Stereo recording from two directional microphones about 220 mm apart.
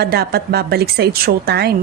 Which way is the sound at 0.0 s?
45° right (ahead or behind).